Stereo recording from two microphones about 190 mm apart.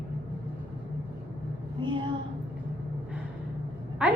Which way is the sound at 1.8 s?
25° right (ahead or behind).